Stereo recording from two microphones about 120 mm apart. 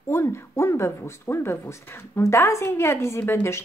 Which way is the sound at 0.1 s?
20° left (ahead or behind).